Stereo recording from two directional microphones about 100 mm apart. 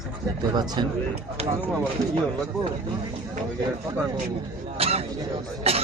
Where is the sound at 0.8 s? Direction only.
55° right (ahead or behind).